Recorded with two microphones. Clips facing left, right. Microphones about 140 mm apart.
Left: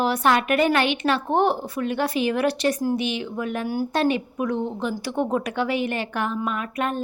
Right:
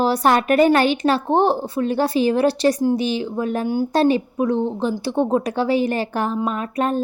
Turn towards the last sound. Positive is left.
turn(degrees=-35)  # may be behind; listen again after turning